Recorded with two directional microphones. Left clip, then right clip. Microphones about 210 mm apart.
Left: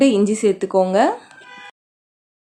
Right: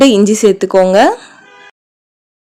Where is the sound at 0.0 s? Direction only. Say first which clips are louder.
Right 8 dB; 35° right (ahead or behind).